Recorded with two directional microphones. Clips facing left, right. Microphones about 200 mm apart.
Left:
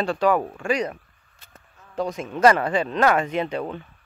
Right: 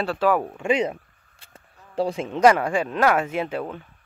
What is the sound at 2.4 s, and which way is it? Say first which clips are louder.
Speech: even; 10° right (ahead or behind).